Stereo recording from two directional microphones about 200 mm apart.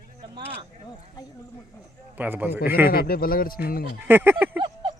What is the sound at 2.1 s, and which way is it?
Speech, 10° right (ahead or behind).